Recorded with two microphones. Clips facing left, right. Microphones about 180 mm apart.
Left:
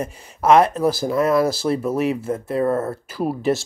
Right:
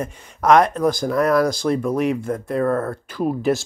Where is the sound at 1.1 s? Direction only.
Centre (ahead or behind).